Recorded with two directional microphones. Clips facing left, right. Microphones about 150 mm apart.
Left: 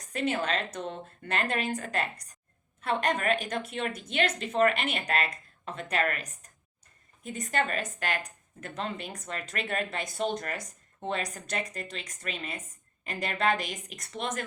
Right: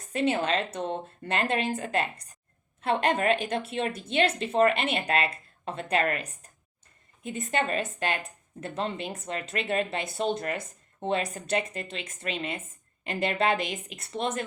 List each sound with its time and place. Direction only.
0.1 s speech: 30° right (ahead or behind)